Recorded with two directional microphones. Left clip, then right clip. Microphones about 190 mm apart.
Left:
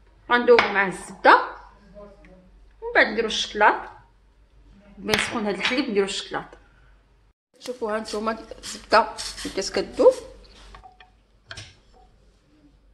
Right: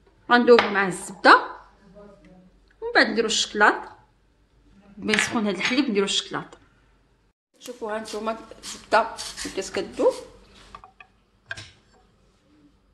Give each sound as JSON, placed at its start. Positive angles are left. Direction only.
{"t": 0.3, "sound": "speech", "side_deg": -55}
{"t": 2.8, "sound": "speech", "side_deg": -55}
{"t": 5.0, "sound": "speech", "side_deg": -45}
{"t": 7.6, "sound": "speech", "side_deg": 15}
{"t": 9.1, "sound": "speech", "side_deg": -15}
{"t": 9.8, "sound": "speech", "side_deg": 15}